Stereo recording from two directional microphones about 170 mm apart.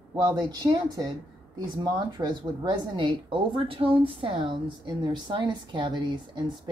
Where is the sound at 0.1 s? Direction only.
25° right (ahead or behind).